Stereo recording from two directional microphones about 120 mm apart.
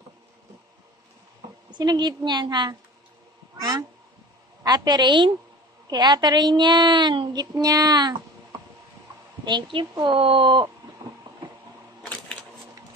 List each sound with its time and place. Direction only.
1.7 s a woman's voice: 35° right (ahead or behind)
4.6 s a woman's voice: 35° right (ahead or behind)